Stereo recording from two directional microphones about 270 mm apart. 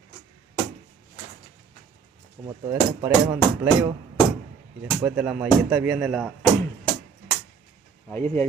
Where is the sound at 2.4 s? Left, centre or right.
Centre.